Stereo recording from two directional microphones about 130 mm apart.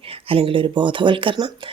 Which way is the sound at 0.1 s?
45° right (ahead or behind).